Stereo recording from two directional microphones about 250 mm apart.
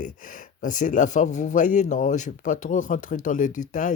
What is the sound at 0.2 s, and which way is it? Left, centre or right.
Speech, left.